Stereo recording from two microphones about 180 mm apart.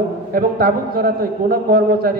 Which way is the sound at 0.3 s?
55° right (ahead or behind).